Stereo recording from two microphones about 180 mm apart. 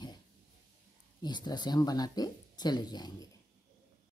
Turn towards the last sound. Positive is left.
turn(degrees=20)  # may be behind; listen again after turning